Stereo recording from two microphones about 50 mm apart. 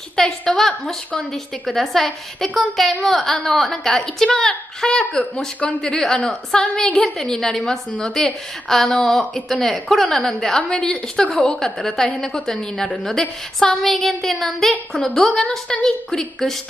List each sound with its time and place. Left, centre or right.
0.1 s a woman's voice: centre
4.3 s a woman's voice: centre
14.7 s a woman's voice: left
15.3 s a woman's voice: centre